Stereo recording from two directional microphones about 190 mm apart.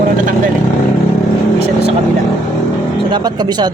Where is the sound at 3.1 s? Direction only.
20° right (ahead or behind).